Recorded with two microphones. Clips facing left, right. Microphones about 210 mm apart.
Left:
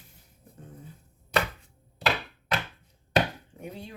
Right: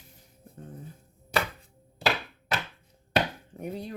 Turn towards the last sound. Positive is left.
turn(degrees=-40)  # may be behind; listen again after turning